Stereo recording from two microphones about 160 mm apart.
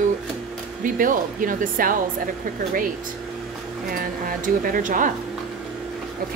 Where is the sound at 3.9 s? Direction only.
65° right (ahead or behind).